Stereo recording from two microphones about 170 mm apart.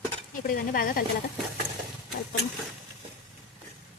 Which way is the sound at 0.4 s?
60° left (ahead or behind).